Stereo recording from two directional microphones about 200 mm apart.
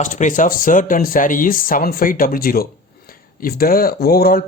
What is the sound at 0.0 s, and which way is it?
Speech, 40° left (ahead or behind).